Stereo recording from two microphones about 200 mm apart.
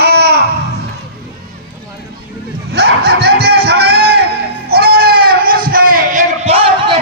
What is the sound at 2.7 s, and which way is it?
Snicker, 55° right (ahead or behind).